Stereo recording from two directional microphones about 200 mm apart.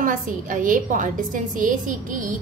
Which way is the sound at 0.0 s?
40° right (ahead or behind).